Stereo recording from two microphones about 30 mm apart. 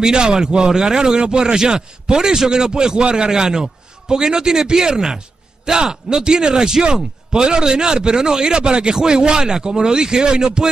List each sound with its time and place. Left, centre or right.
0.3 s speech: right
6.8 s speech: right